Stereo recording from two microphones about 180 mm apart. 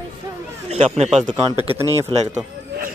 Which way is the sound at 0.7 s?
35° right (ahead or behind).